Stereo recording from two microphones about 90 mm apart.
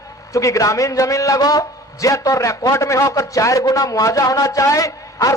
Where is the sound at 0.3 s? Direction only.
35° left (ahead or behind).